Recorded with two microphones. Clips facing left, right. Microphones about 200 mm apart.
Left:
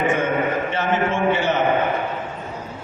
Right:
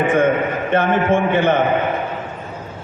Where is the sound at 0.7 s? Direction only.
55° right (ahead or behind).